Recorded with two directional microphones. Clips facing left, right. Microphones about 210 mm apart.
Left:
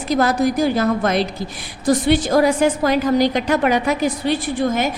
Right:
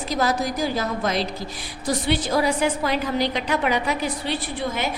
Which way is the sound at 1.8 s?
45° left (ahead or behind).